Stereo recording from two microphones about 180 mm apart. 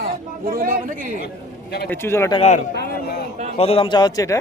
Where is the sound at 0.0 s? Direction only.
50° right (ahead or behind).